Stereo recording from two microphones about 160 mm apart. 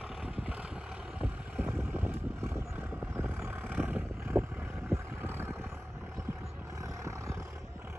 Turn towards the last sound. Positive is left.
turn(degrees=-20)  # may be behind; listen again after turning